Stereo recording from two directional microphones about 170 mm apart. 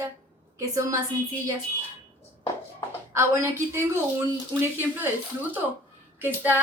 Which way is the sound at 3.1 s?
15° right (ahead or behind).